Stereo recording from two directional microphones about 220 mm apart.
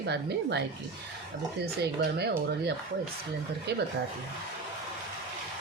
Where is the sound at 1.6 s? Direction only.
45° right (ahead or behind).